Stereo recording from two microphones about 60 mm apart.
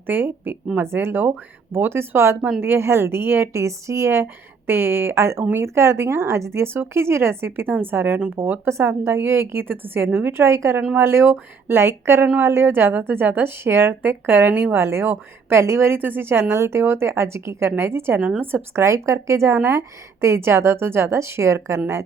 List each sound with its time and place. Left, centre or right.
0.1 s a woman's voice: right
16.0 s a woman's voice: right
18.8 s a woman's voice: right